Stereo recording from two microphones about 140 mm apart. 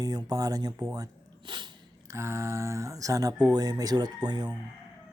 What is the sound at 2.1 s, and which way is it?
Speech, 20° right (ahead or behind).